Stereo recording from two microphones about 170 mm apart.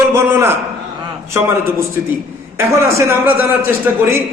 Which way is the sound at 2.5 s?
15° right (ahead or behind).